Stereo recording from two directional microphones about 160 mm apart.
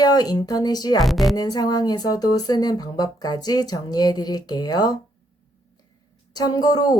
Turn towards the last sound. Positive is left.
turn(degrees=25)  # may be behind; listen again after turning